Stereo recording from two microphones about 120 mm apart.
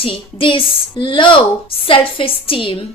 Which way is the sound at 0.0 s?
50° left (ahead or behind).